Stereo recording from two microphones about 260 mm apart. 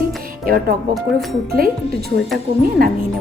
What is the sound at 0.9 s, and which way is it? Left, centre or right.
Speech, centre.